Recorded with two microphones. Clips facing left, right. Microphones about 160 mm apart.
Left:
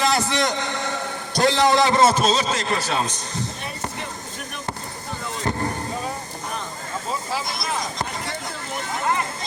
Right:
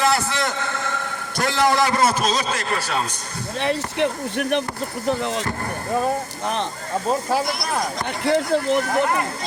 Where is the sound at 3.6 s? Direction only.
85° right.